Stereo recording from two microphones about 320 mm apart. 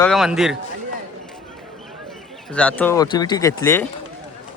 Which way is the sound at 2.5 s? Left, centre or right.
Centre.